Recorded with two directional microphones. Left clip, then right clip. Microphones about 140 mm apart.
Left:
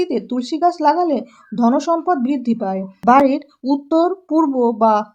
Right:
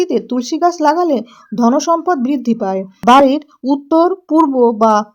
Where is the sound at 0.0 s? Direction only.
50° right (ahead or behind).